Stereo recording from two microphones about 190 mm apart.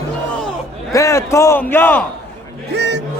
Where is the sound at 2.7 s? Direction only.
65° right (ahead or behind).